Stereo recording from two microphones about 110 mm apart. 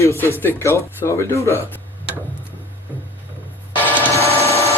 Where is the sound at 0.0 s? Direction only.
25° left (ahead or behind).